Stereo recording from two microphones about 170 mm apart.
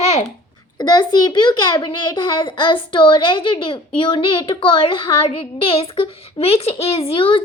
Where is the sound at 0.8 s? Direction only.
25° left (ahead or behind).